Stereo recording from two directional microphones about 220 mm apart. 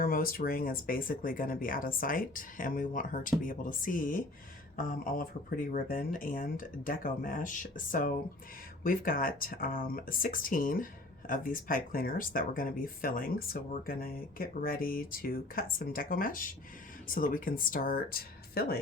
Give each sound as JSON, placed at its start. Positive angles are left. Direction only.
{"t": 0.0, "sound": "speech", "side_deg": 40}